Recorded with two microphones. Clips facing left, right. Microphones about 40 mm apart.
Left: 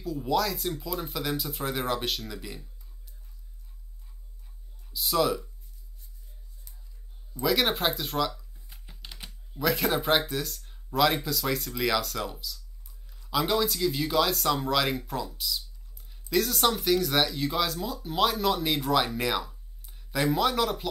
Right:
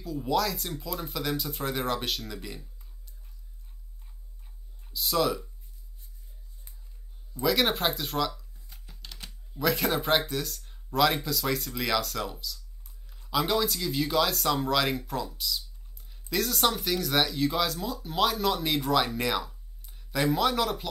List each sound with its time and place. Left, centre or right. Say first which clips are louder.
0.0 s speech: left 1 dB; centre
4.9 s speech: left 1 dB; centre
7.4 s speech: even; centre
8.7 s typing: left 1 dB; left
9.6 s speech: even; centre